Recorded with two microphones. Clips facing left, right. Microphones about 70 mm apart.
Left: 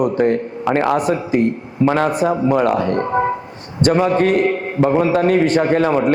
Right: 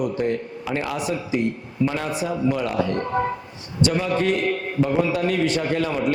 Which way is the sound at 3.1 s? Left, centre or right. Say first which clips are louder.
Left 6 dB; left.